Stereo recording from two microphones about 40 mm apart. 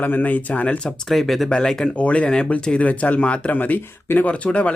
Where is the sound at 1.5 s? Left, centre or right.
Centre.